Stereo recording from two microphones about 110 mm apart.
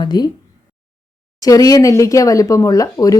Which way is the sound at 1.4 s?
30° left (ahead or behind).